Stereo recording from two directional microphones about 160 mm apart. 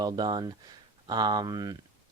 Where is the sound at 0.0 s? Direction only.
25° right (ahead or behind).